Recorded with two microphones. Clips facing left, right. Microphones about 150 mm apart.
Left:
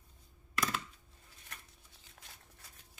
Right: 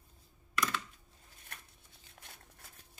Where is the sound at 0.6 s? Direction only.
40° left (ahead or behind).